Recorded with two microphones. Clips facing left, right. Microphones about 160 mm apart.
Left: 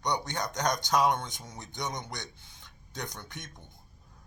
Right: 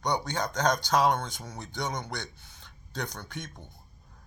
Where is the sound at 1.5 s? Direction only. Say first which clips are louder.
Right 3 dB; 20° left (ahead or behind).